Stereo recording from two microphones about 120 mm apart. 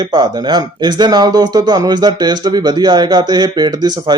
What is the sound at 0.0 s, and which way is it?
A man's voice, 35° right (ahead or behind).